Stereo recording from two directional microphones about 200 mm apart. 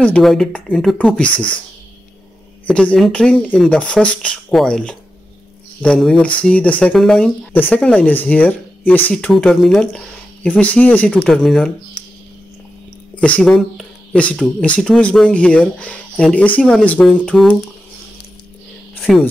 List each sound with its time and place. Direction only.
0.0 s speech: 5° left (ahead or behind)
1.3 s speech: 25° left (ahead or behind)
2.6 s speech: 5° left (ahead or behind)
13.1 s speech: 5° left (ahead or behind)